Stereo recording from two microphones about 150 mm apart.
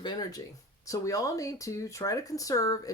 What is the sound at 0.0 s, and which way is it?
Speech, 25° left (ahead or behind).